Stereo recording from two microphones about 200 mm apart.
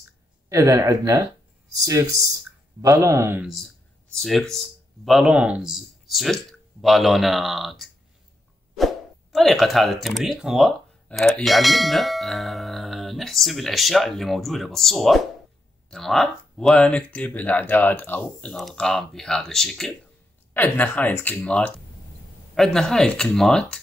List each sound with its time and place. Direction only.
0.5 s speech: 15° right (ahead or behind)
3.4 s speech: centre (ahead or behind)